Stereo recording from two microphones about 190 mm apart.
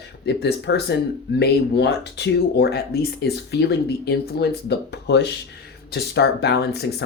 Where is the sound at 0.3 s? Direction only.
60° left (ahead or behind).